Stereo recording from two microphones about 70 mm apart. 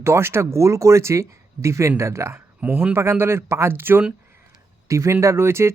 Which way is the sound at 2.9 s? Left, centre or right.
Right.